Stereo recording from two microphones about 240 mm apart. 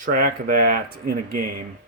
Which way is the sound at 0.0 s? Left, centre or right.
Right.